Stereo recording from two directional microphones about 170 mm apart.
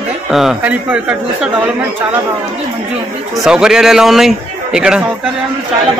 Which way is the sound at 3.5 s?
5° right (ahead or behind).